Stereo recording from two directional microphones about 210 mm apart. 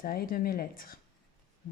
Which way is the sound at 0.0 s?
45° left (ahead or behind).